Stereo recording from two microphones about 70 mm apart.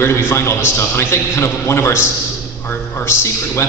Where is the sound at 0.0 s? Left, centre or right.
Left.